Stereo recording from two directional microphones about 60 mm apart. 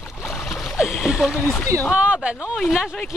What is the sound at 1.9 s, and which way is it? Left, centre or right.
Speech, centre.